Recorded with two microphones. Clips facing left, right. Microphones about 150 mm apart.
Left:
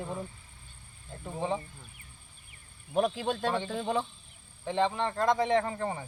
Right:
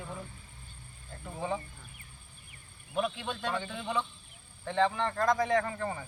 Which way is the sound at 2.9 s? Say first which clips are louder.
Left 5 dB; 40° left (ahead or behind).